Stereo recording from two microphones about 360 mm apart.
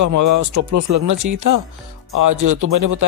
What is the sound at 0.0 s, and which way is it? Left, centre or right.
Speech, right.